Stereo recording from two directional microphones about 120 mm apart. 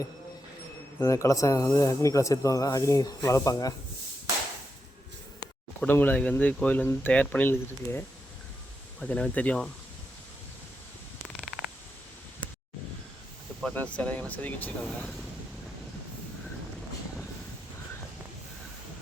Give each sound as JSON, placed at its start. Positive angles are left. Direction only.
{"t": 0.9, "sound": "speech", "side_deg": 25}
{"t": 5.8, "sound": "speech", "side_deg": 15}
{"t": 9.0, "sound": "speech", "side_deg": 5}
{"t": 11.3, "sound": "a sound", "side_deg": -5}
{"t": 13.7, "sound": "speech", "side_deg": 10}
{"t": 14.8, "sound": "speech", "side_deg": 0}